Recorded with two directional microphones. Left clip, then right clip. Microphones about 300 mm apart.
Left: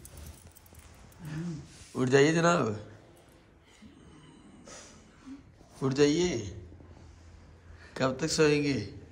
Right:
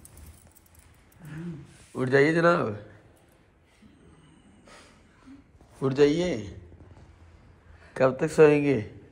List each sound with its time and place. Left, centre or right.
2.0 s speech: centre
5.8 s a man's voice: centre
7.9 s a man's voice: centre